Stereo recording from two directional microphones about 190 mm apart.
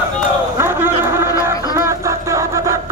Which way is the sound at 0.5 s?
10° right (ahead or behind).